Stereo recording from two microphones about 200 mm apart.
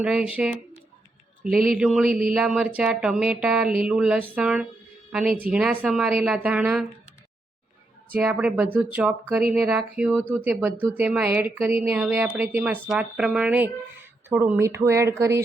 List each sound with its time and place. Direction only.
0.0 s speech: 5° right (ahead or behind)
1.5 s speech: 45° right (ahead or behind)
1.8 s speech: 5° right (ahead or behind)
8.1 s speech: 5° right (ahead or behind)